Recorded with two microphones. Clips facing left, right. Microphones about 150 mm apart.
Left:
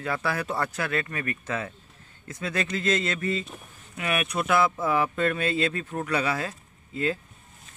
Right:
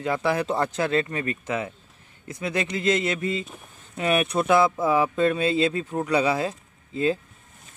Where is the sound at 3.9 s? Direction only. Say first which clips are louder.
Right 5 dB; 25° right (ahead or behind).